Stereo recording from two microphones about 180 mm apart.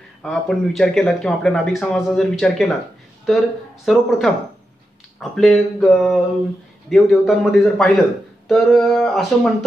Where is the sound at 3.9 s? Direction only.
Centre (ahead or behind).